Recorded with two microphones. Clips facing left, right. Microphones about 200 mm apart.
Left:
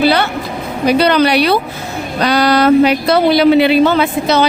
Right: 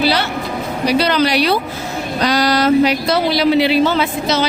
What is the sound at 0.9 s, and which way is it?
Speech, 60° left (ahead or behind).